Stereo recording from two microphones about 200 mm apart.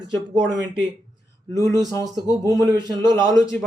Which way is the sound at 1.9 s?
20° right (ahead or behind).